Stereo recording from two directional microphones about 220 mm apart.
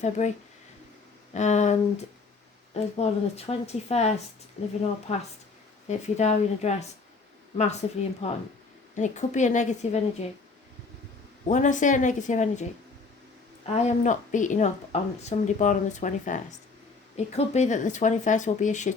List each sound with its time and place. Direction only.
0.0 s speech: 30° left (ahead or behind)
3.0 s speech: 30° left (ahead or behind)
11.4 s speech: 35° left (ahead or behind)
13.8 s speech: 35° left (ahead or behind)